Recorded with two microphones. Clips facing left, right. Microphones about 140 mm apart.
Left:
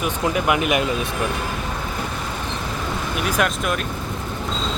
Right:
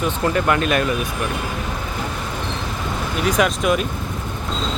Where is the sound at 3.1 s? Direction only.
5° left (ahead or behind).